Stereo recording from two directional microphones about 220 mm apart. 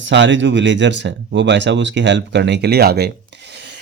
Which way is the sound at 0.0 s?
55° right (ahead or behind).